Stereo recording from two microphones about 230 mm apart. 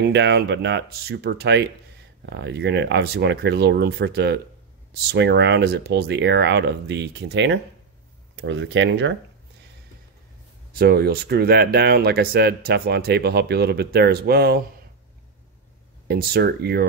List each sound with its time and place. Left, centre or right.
0.0 s speech: right
10.7 s speech: right
16.1 s speech: right